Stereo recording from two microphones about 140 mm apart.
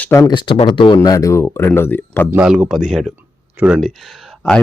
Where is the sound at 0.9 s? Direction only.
25° left (ahead or behind).